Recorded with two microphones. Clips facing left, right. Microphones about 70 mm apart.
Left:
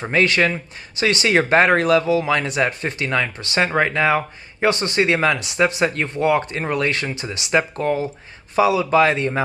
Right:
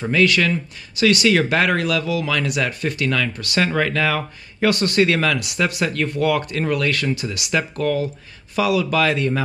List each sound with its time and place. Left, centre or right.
0.0 s speech: left